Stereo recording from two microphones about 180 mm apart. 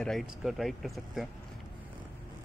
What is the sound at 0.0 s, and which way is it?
Speech, centre (ahead or behind).